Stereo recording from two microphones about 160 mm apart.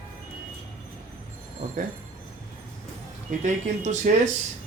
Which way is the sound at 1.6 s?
50° right (ahead or behind).